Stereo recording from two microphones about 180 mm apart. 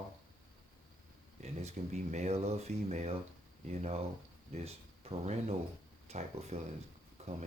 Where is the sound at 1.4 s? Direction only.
40° right (ahead or behind).